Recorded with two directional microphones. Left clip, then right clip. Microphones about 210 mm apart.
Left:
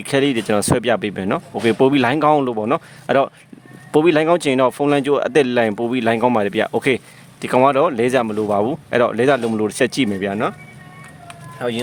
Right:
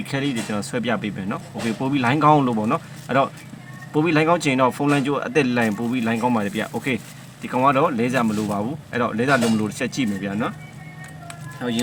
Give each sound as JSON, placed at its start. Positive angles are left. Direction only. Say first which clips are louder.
{"t": 0.0, "sound": "speech", "louder": "left 8 dB", "side_deg": 55}
{"t": 11.6, "sound": "speech", "louder": "left 5 dB", "side_deg": 50}